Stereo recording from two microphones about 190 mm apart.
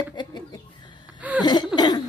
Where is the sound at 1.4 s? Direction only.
25° left (ahead or behind).